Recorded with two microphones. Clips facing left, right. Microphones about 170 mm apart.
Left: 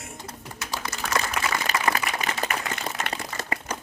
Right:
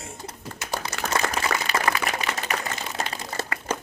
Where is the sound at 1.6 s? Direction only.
45° left (ahead or behind).